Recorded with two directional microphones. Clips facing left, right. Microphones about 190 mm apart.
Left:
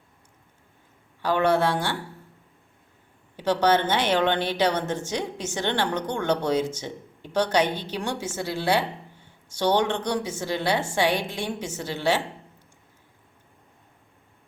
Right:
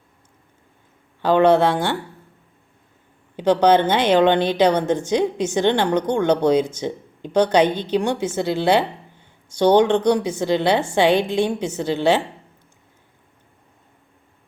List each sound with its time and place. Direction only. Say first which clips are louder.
1.2 s a woman's voice: right 7 dB; 20° right (ahead or behind)
3.3 s a woman's voice: right 6 dB; 15° right (ahead or behind)